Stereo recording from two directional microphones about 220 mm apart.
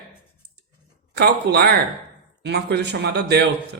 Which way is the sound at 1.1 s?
50° right (ahead or behind).